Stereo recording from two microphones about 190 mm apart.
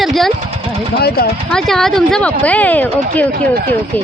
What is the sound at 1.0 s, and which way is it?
Speech, 55° left (ahead or behind).